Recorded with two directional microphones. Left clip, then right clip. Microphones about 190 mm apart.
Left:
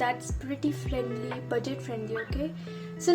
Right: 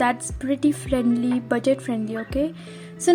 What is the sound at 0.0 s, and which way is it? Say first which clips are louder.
Speech: right 7 dB; 35° right (ahead or behind).